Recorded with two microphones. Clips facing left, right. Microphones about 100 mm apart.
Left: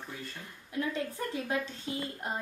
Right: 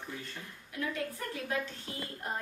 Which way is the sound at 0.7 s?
25° left (ahead or behind).